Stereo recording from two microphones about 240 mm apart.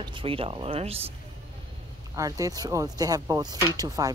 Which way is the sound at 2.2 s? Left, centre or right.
Centre.